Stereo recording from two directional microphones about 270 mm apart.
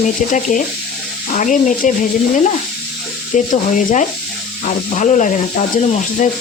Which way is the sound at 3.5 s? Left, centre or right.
Left.